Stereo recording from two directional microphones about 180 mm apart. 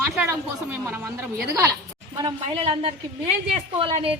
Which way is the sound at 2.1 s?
25° right (ahead or behind).